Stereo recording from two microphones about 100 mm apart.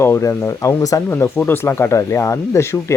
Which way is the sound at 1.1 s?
20° left (ahead or behind).